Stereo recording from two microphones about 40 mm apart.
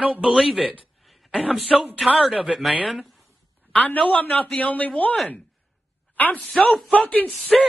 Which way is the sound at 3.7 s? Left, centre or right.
Left.